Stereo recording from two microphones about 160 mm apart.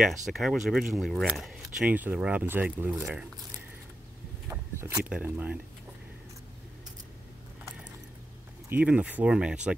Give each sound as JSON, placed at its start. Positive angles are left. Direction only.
{"t": 0.0, "sound": "speech", "side_deg": 0}
{"t": 4.5, "sound": "a sound", "side_deg": -15}
{"t": 5.1, "sound": "speech", "side_deg": -10}
{"t": 8.6, "sound": "speech", "side_deg": -10}